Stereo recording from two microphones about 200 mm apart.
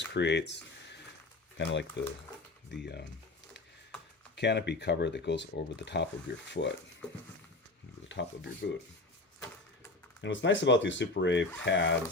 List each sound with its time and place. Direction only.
0.0 s a sound: 60° left (ahead or behind)
1.5 s speech: 60° left (ahead or behind)
4.4 s speech: 60° left (ahead or behind)
8.0 s a sound: 65° left (ahead or behind)
8.6 s speech: 55° left (ahead or behind)
10.2 s speech: 65° left (ahead or behind)